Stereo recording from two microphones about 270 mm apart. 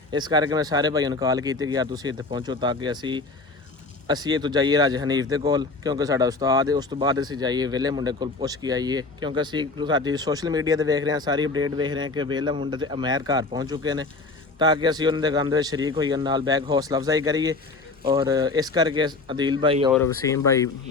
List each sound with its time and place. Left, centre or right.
0.1 s speech: centre
15.7 s speech: right
16.0 s speech: centre
19.9 s speech: centre